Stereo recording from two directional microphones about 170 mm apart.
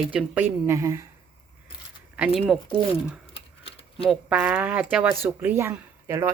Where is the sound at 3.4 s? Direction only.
35° left (ahead or behind).